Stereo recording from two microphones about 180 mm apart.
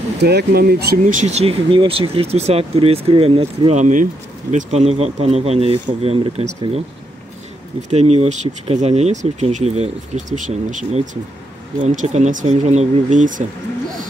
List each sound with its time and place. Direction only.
0.2 s speech: 65° right (ahead or behind)
1.0 s speech: 40° right (ahead or behind)
7.9 s speech: 35° right (ahead or behind)